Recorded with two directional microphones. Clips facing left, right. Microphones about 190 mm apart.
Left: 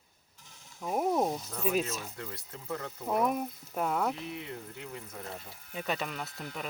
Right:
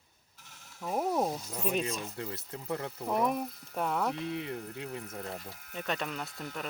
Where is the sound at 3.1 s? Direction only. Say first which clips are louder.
Left 1 dB; centre (ahead or behind).